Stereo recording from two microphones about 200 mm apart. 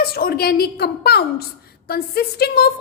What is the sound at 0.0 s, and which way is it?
A woman's voice, 50° left (ahead or behind).